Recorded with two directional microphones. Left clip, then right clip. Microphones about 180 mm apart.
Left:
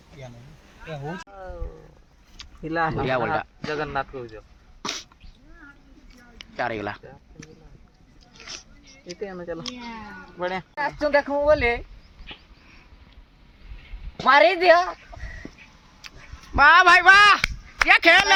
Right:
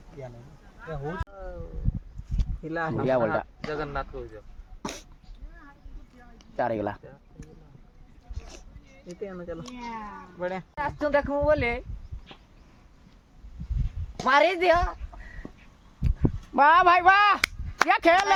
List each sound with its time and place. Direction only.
1.3 s a sound: 50° left (ahead or behind)
2.6 s speech: 45° left (ahead or behind)
3.0 s a man's voice: 50° right (ahead or behind)
3.7 s speech: 45° left (ahead or behind)
4.8 s cough: 65° right (ahead or behind)
6.6 s a man's voice: 55° right (ahead or behind)
9.2 s speech: 55° left (ahead or behind)
10.4 s speech: 40° left (ahead or behind)
14.3 s speech: 30° left (ahead or behind)
16.6 s a man's voice: 45° right (ahead or behind)